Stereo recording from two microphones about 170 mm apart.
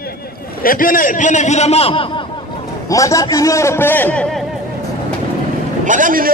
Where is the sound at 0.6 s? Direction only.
55° left (ahead or behind); by 2.2 s 35° left (ahead or behind).